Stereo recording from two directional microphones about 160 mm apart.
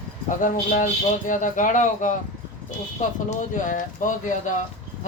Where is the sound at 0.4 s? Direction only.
55° left (ahead or behind).